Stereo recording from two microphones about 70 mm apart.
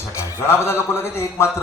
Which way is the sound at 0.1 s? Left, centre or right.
Left.